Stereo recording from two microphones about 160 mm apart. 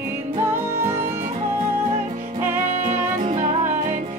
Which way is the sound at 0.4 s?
15° right (ahead or behind).